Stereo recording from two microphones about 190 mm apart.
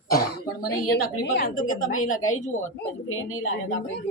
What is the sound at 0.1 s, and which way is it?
Speech, 50° left (ahead or behind).